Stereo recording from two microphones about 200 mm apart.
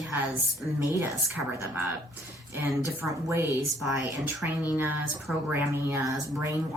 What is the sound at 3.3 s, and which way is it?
Speech, 10° right (ahead or behind).